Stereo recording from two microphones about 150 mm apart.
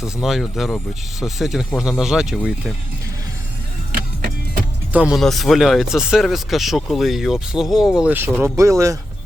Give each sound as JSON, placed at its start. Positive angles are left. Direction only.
{"t": 0.0, "sound": "speech", "side_deg": 0}
{"t": 3.9, "sound": "music", "side_deg": -75}
{"t": 4.9, "sound": "speech", "side_deg": -10}